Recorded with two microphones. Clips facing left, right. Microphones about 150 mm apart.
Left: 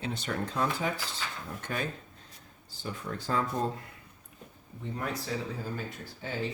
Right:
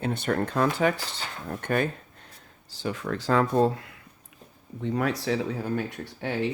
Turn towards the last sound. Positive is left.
turn(degrees=-70)  # may be behind; listen again after turning